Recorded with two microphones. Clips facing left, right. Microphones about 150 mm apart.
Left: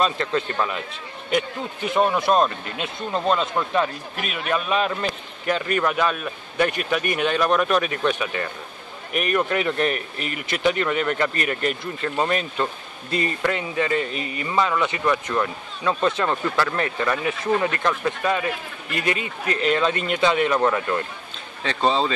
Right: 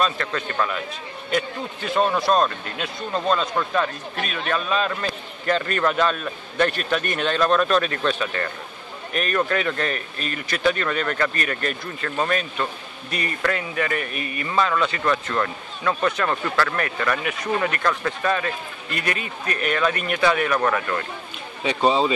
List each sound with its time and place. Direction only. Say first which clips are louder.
0.0 s speech: left 2 dB; 25° left (ahead or behind)
21.6 s speech: right 2 dB; 10° right (ahead or behind)